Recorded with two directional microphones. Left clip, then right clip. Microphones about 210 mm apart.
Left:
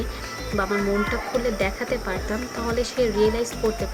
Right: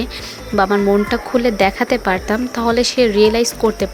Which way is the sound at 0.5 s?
40° right (ahead or behind).